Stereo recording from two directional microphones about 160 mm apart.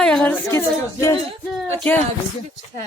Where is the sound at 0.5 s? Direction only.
15° left (ahead or behind).